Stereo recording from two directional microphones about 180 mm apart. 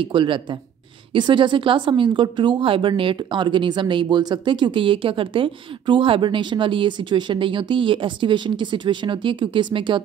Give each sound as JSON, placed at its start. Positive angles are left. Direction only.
{"t": 0.0, "sound": "a woman's voice", "side_deg": -25}